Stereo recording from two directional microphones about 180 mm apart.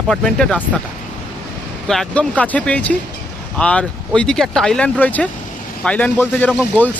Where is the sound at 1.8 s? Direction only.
5° left (ahead or behind).